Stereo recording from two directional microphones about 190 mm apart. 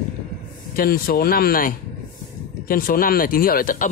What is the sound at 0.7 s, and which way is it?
Speech, 50° left (ahead or behind).